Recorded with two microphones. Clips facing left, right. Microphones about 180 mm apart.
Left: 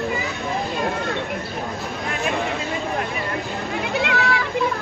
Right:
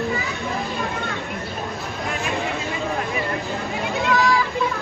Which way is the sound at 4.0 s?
65° left (ahead or behind).